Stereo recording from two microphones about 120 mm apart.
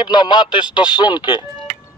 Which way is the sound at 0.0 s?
40° left (ahead or behind).